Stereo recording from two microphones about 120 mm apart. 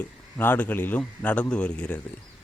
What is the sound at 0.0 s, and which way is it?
Speech, 15° left (ahead or behind).